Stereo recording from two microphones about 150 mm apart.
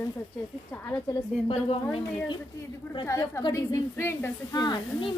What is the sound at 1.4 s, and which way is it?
A woman's voice, 35° left (ahead or behind).